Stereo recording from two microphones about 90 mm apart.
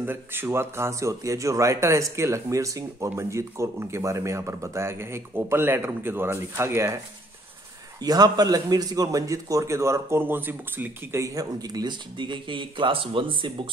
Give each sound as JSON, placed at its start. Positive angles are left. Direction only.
{"t": 0.0, "sound": "a man's voice", "side_deg": -25}
{"t": 8.0, "sound": "a man's voice", "side_deg": -45}